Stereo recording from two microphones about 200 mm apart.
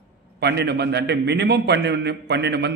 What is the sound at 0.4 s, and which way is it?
A man's voice, 55° right (ahead or behind).